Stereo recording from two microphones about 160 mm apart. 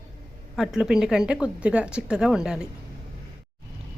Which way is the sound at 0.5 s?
5° right (ahead or behind).